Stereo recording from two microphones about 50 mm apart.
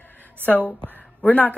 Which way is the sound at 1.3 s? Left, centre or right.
Left.